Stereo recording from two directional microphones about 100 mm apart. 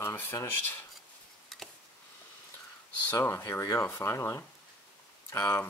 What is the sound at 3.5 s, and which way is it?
Speech, 40° left (ahead or behind).